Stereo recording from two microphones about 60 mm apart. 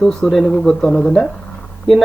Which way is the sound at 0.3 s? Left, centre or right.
Centre.